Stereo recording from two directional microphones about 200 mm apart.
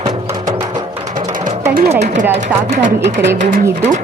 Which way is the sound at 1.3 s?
35° right (ahead or behind).